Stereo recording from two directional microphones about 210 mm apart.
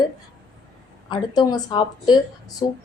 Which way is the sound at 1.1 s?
20° left (ahead or behind).